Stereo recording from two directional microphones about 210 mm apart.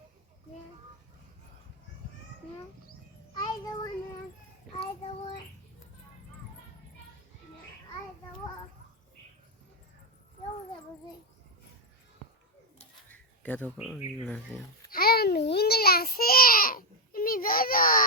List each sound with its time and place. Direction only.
3.3 s child singing: 20° left (ahead or behind)
4.8 s child singing: 25° left (ahead or behind)
12.8 s a sound: 5° left (ahead or behind)
13.7 s speech: centre (ahead or behind)
14.8 s babbling: 45° left (ahead or behind)